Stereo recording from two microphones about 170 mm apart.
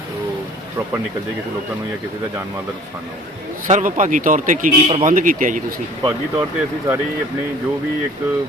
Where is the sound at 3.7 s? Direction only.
45° right (ahead or behind).